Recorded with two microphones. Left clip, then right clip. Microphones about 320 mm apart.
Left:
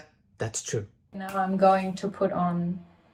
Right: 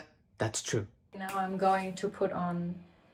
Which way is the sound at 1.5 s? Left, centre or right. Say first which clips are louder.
Left 8 dB; centre.